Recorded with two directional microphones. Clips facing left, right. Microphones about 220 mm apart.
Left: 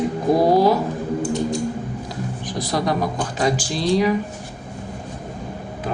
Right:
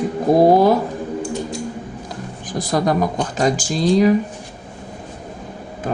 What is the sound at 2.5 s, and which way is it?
Speech, 50° right (ahead or behind).